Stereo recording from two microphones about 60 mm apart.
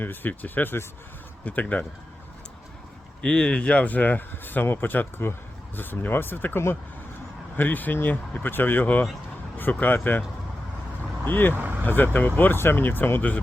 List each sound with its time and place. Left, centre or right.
0.0 s speech: left
1.5 s speech: left
3.2 s speech: centre
11.3 s speech: left
11.5 s speech: right
11.9 s speech: left